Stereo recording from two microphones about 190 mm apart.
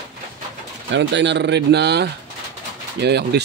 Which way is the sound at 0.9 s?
70° right (ahead or behind).